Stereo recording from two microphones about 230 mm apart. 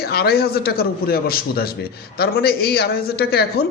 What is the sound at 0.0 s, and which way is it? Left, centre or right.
A man's voice, left.